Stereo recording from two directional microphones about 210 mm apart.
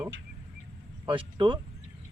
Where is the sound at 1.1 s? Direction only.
25° right (ahead or behind).